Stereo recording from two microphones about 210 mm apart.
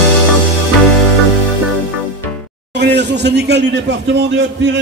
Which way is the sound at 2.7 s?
55° right (ahead or behind).